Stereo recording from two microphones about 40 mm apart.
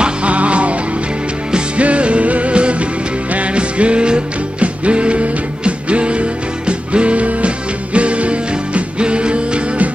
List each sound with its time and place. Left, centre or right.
0.0 s music: right
1.8 s music: right